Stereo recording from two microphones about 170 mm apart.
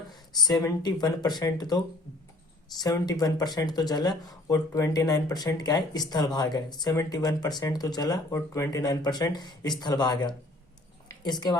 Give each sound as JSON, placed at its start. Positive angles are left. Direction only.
{"t": 0.4, "sound": "speech", "side_deg": 25}
{"t": 3.1, "sound": "a woman's voice", "side_deg": 20}